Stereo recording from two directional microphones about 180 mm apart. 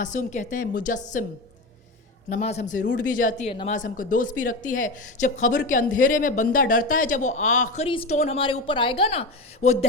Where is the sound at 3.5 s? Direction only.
35° left (ahead or behind).